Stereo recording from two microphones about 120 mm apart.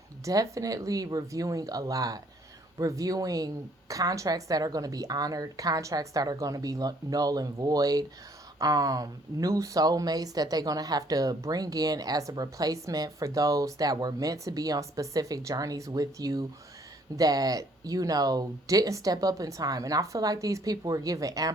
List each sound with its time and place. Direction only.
0.3 s speech: 30° right (ahead or behind)